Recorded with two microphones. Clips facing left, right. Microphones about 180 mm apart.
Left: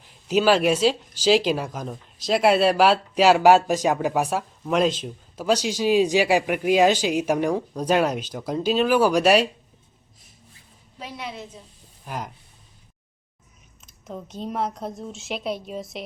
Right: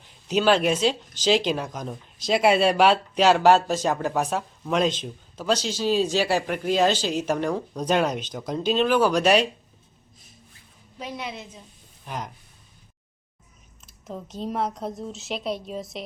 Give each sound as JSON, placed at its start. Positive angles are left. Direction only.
{"t": 0.0, "sound": "speech", "side_deg": 5}
{"t": 11.0, "sound": "a woman's voice", "side_deg": 0}
{"t": 13.8, "sound": "a woman's voice", "side_deg": 0}